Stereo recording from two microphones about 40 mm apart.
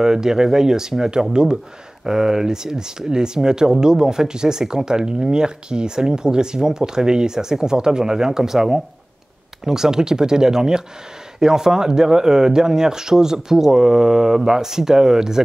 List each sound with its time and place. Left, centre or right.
0.0 s speech: centre